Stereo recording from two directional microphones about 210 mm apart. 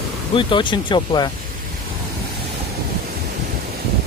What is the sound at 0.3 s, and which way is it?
Speech, 25° left (ahead or behind).